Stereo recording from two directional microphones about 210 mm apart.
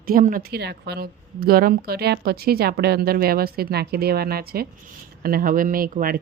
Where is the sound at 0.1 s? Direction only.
40° right (ahead or behind).